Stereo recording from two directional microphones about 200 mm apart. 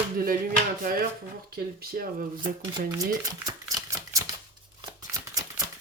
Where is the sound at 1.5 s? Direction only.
50° right (ahead or behind).